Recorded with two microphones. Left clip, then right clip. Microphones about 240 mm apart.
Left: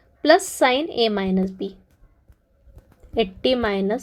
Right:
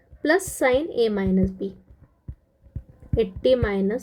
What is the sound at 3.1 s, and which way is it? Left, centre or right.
Speech, centre.